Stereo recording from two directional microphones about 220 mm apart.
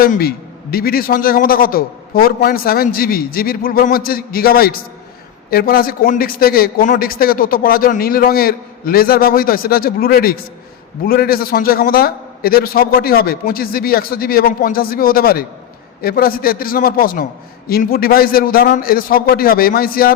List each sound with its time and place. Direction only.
0.0 s a man's voice: 40° left (ahead or behind)